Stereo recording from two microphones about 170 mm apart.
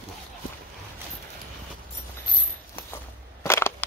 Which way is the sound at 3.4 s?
15° left (ahead or behind).